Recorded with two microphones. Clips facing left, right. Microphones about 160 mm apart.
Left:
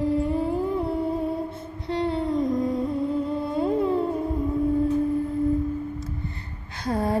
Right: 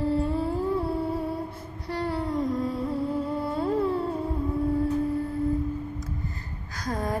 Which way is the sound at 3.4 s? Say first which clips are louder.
Left 2 dB; 20° left (ahead or behind).